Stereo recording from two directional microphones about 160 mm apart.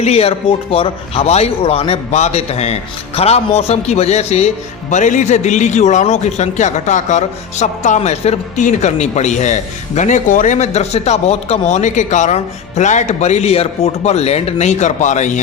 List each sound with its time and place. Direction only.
0.0 s speech: 40° left (ahead or behind)